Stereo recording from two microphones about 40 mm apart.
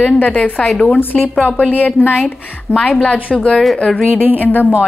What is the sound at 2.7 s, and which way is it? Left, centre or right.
Speech, left.